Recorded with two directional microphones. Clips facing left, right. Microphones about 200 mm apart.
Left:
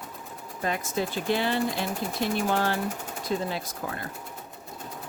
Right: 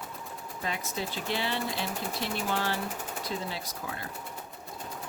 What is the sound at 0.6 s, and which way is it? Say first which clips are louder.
Speech: left 6 dB; 50° left (ahead or behind).